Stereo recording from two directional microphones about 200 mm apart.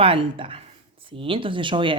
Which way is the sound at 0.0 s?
25° right (ahead or behind).